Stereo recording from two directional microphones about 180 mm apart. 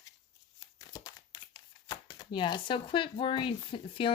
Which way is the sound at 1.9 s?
20° left (ahead or behind).